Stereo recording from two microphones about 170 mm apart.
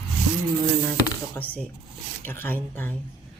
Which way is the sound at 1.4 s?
15° left (ahead or behind).